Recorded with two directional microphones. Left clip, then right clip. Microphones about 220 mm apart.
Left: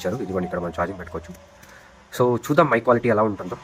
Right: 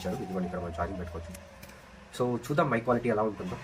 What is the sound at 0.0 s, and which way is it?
A man's voice, 50° left (ahead or behind).